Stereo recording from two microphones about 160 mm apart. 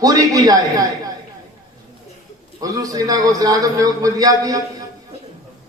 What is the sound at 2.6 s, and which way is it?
A man's voice, 20° right (ahead or behind).